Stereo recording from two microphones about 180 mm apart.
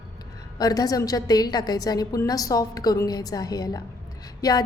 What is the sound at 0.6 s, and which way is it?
A woman's voice, 20° left (ahead or behind).